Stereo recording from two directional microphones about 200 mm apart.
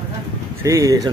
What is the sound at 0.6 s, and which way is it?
Speech, 15° right (ahead or behind).